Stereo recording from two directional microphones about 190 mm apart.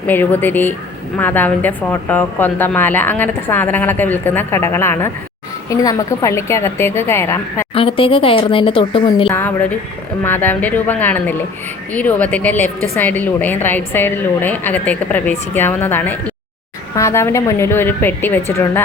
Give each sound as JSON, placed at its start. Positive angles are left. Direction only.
{"t": 0.1, "sound": "a woman's voice", "side_deg": 10}
{"t": 7.7, "sound": "speech", "side_deg": 30}
{"t": 9.3, "sound": "a woman's voice", "side_deg": 10}